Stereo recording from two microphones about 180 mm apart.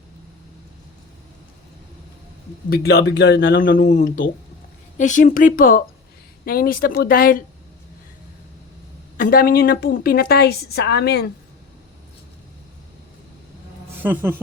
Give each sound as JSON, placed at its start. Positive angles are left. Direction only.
{"t": 2.6, "sound": "a woman's voice", "side_deg": 60}
{"t": 3.8, "sound": "speech", "side_deg": 45}
{"t": 9.1, "sound": "a woman's voice", "side_deg": 55}
{"t": 14.0, "sound": "a woman's voice", "side_deg": -10}